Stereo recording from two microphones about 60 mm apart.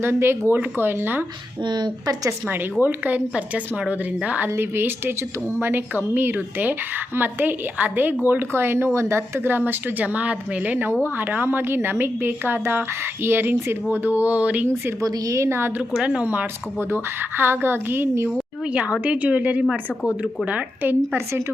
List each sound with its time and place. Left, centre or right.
0.0 s a woman's voice: right
2.5 s speech: right
4.4 s a woman's voice: right
10.0 s a woman's voice: right
15.0 s a woman's voice: right
15.8 s a woman's voice: centre; by 18.1 s right
18.7 s speech: centre